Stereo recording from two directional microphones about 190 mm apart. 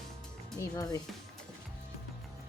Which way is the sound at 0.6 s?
15° left (ahead or behind).